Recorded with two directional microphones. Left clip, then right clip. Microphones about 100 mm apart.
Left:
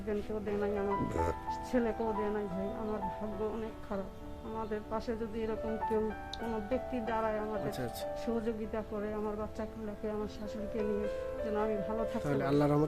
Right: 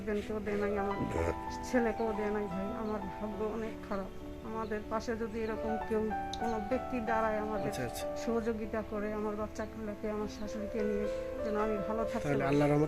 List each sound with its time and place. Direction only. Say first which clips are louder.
0.1 s speech: even; 20° left (ahead or behind)
0.9 s speech: left 1 dB; centre (ahead or behind)
1.7 s speech: right 2 dB; 15° left (ahead or behind)
4.7 s speech: right 1 dB; 15° left (ahead or behind)
11.4 s speech: right 1 dB; 10° left (ahead or behind)